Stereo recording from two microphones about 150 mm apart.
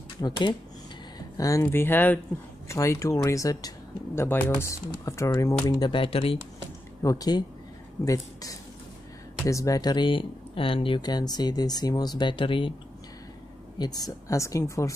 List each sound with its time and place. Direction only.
0.2 s speech: 30° left (ahead or behind)
7.0 s speech: 25° left (ahead or behind)
13.7 s speech: 25° left (ahead or behind)